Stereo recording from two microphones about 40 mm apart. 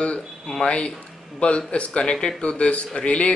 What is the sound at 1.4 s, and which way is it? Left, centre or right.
Speech, left.